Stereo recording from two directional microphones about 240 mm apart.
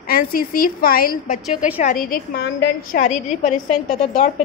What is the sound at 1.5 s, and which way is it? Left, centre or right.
Speech, centre.